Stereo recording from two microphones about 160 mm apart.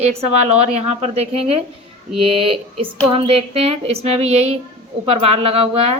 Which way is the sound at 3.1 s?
35° right (ahead or behind).